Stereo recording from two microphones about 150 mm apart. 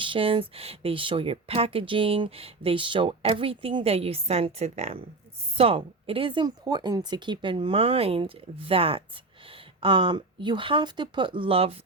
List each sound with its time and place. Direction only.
0.0 s speech: 35° right (ahead or behind)